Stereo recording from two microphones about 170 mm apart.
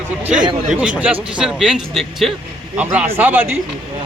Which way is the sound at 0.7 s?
5° right (ahead or behind).